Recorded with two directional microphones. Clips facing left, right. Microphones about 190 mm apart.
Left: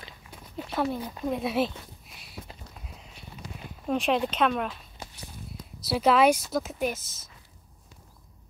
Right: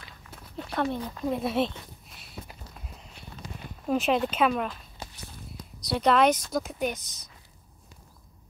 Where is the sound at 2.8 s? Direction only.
Centre (ahead or behind).